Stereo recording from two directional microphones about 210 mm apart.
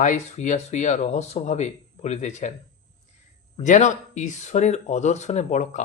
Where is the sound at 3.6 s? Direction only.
35° left (ahead or behind).